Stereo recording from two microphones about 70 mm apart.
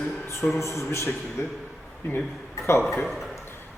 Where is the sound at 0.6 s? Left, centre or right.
Left.